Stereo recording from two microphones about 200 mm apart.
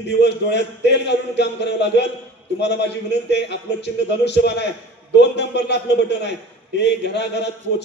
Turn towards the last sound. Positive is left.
turn(degrees=60)  # may be behind; listen again after turning